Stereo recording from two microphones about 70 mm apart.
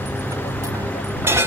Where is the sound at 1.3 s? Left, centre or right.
Right.